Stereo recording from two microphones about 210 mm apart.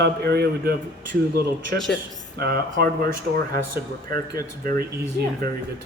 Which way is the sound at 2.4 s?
50° right (ahead or behind).